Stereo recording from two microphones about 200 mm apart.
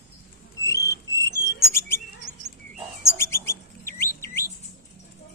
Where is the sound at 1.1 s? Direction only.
15° left (ahead or behind).